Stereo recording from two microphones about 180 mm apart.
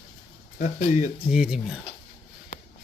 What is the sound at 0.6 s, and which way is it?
Speech, 40° left (ahead or behind).